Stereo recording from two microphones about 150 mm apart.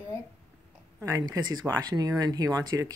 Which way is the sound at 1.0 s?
25° right (ahead or behind).